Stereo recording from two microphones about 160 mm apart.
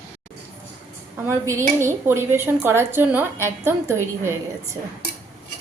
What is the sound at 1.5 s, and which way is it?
A woman's voice, 15° right (ahead or behind).